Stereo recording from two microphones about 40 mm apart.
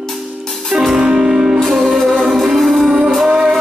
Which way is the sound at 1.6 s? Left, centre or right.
Centre.